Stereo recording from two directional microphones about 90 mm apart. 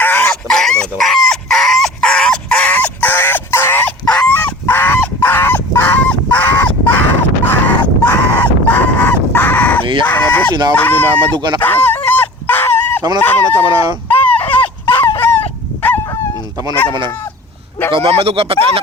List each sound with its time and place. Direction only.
0.0 s dog: 20° left (ahead or behind)
0.3 s chicken: 5° left (ahead or behind); by 3.9 s 25° left (ahead or behind)
4.1 s fowl: 15° left (ahead or behind)
10.0 s chicken: 20° left (ahead or behind)
10.8 s speech: 20° left (ahead or behind)
11.3 s speech: 55° right (ahead or behind)
11.6 s speech: 20° left (ahead or behind)
12.0 s fowl: 20° left (ahead or behind)
13.2 s speech: 20° left (ahead or behind)
14.1 s a sound: 20° left (ahead or behind)
15.2 s dog: 20° left (ahead or behind)
17.9 s speech: 90° right